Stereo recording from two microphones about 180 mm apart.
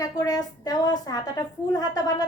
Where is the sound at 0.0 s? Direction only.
20° left (ahead or behind).